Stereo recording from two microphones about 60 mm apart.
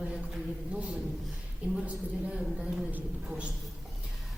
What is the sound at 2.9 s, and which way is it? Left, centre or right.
Speech, right.